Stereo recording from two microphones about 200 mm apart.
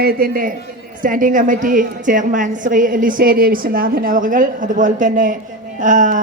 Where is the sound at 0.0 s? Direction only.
50° right (ahead or behind).